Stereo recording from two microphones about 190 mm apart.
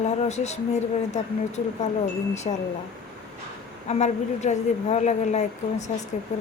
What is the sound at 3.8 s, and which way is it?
Speech, 35° left (ahead or behind).